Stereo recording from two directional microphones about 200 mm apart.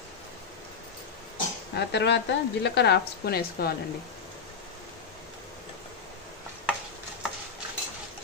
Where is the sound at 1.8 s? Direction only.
60° left (ahead or behind).